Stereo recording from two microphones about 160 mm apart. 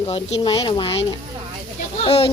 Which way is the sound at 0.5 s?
30° left (ahead or behind).